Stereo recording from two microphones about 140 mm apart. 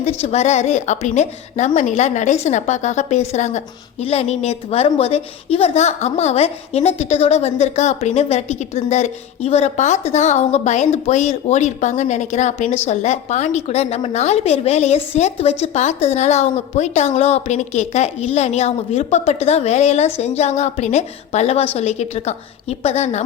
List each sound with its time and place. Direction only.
0.0 s a woman's voice: 50° left (ahead or behind)